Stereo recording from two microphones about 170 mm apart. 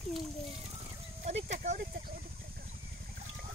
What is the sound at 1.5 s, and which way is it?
Speech, 45° right (ahead or behind).